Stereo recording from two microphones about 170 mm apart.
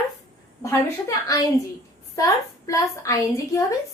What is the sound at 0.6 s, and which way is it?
A woman's voice, 15° left (ahead or behind).